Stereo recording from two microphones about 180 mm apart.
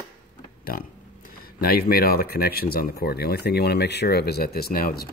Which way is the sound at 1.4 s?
55° left (ahead or behind).